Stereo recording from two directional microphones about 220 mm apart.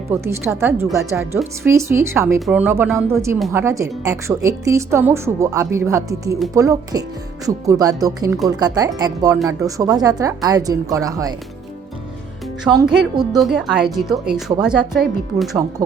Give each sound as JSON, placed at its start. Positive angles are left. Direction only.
{"t": 0.1, "sound": "speech", "side_deg": -10}
{"t": 3.3, "sound": "speech", "side_deg": 0}
{"t": 3.6, "sound": "speech", "side_deg": -15}
{"t": 12.6, "sound": "speech", "side_deg": -5}